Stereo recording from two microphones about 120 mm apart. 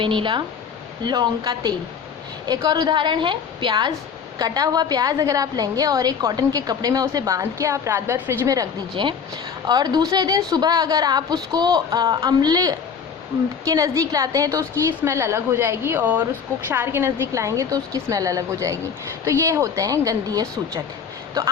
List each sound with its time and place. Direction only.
0.0 s a woman's voice: 45° right (ahead or behind); by 20.8 s 25° right (ahead or behind)